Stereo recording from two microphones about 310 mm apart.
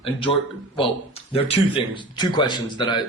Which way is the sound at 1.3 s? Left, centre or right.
Centre.